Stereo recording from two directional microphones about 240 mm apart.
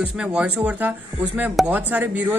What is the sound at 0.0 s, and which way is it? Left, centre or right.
A woman's voice, centre.